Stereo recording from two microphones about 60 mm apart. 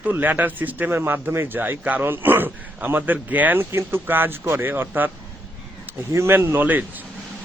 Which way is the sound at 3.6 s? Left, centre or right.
Right.